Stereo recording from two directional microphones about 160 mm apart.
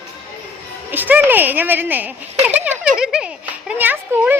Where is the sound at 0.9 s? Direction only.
10° right (ahead or behind).